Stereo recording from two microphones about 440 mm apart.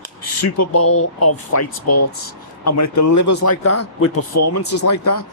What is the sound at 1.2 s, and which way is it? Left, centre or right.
Speech, left.